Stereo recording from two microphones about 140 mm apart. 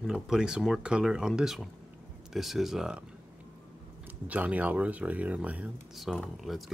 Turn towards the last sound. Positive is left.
turn(degrees=0)  # may be behind; listen again after turning